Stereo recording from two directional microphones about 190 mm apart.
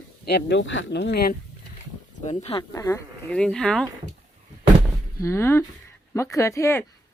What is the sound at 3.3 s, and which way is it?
Speech, 5° left (ahead or behind).